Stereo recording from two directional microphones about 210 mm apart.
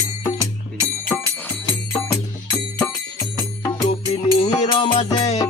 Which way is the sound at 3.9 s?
30° left (ahead or behind).